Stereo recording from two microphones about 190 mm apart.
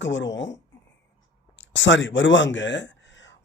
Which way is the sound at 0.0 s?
70° left (ahead or behind).